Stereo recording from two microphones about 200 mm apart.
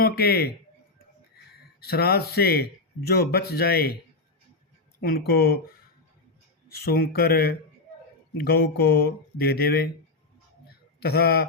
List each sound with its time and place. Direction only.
0.0 s speech: 50° left (ahead or behind)
1.8 s speech: 50° left (ahead or behind)
4.9 s speech: 50° left (ahead or behind)
6.8 s speech: 50° left (ahead or behind)
11.0 s speech: 50° left (ahead or behind)